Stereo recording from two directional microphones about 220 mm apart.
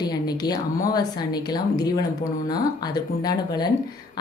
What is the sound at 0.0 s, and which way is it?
A woman's voice, 15° left (ahead or behind).